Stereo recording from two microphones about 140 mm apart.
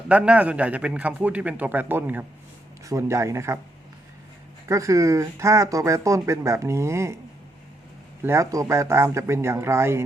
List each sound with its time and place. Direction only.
0.1 s a man's voice: 10° right (ahead or behind)
4.7 s speech: 20° right (ahead or behind)
8.2 s speech: 20° right (ahead or behind)